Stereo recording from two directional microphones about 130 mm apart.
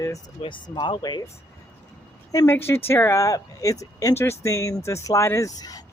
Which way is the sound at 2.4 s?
15° left (ahead or behind).